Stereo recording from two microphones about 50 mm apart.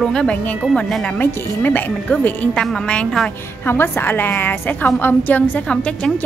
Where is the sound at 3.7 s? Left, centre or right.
Left.